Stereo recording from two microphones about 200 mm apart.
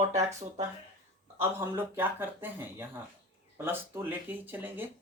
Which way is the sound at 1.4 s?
10° right (ahead or behind).